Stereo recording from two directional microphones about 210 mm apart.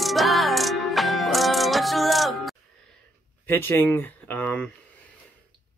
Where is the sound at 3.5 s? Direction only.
10° left (ahead or behind).